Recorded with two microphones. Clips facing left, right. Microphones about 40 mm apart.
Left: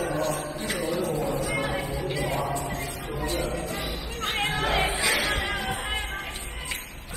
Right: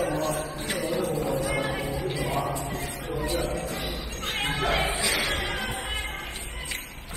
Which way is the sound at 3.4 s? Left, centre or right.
Left.